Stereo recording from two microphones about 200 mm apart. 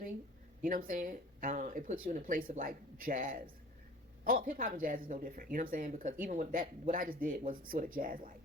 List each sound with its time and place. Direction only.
0.6 s speech: 45° right (ahead or behind)